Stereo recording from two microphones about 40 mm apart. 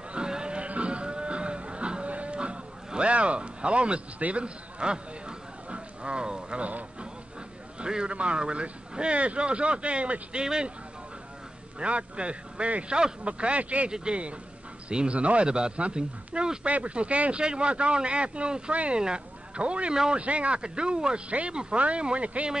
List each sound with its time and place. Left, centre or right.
0.1 s a sound: right
4.2 s speech: right
5.7 s a sound: right
6.6 s a sound: right
7.8 s speech: right
10.4 s speech: centre
11.8 s speech: right
12.9 s speech: right
13.3 s speech: right
13.8 s speech: right
16.6 s speech: right
19.9 s speech: centre
20.2 s speech: right
21.3 s speech: right